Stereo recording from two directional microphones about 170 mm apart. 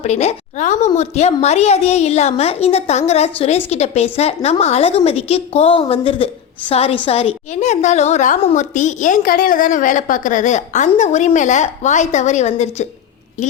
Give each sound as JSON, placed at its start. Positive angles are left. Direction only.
{"t": 0.0, "sound": "a woman's voice", "side_deg": 40}